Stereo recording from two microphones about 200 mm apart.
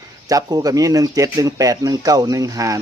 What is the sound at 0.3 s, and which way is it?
Speech, 20° right (ahead or behind).